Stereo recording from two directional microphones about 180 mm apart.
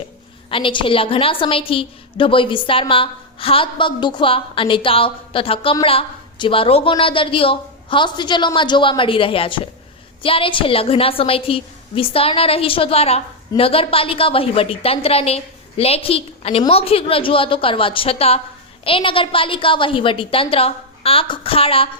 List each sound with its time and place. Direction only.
0.5 s a woman's voice: 30° left (ahead or behind)